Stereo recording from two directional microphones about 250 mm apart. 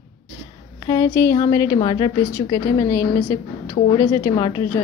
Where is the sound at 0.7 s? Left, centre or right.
Centre.